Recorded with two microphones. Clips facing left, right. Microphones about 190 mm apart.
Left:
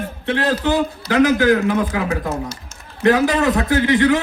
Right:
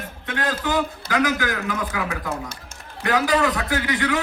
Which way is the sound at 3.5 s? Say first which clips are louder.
Left 8 dB; 40° left (ahead or behind).